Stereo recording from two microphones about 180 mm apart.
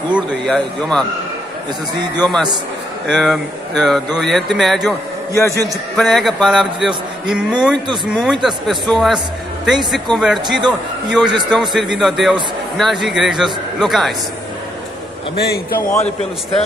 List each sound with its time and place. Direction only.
0.1 s a man's voice: centre (ahead or behind)
2.1 s a man's voice: 5° left (ahead or behind)
5.3 s a man's voice: 15° left (ahead or behind)
5.9 s a man's voice: centre (ahead or behind)
15.3 s a man's voice: 65° left (ahead or behind)